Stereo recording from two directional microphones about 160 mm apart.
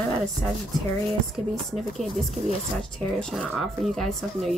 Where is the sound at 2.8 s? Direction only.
5° left (ahead or behind).